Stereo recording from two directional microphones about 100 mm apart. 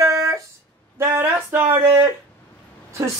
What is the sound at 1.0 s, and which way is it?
Female singing, 25° right (ahead or behind).